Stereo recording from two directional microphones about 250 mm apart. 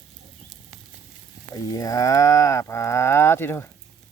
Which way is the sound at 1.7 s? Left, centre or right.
Centre.